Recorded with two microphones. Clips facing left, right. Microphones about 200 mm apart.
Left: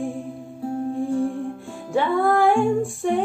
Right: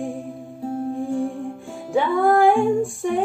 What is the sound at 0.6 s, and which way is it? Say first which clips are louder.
Music: left 1 dB; 15° right (ahead or behind).